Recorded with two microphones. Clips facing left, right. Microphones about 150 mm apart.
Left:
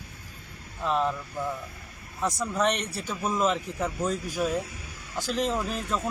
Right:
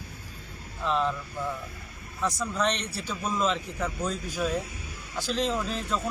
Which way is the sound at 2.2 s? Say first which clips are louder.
Left 2 dB; 15° left (ahead or behind).